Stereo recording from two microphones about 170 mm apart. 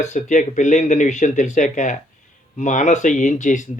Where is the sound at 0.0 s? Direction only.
45° left (ahead or behind).